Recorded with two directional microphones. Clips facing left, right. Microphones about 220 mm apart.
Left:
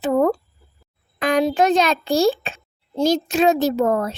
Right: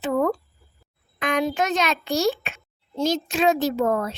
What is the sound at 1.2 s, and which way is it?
A child's voice, 35° left (ahead or behind).